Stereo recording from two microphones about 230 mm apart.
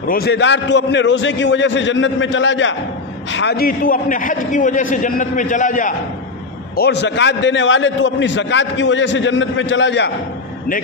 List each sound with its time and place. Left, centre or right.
0.0 s a man's voice: left
3.3 s a man's voice: left
6.8 s a man's voice: left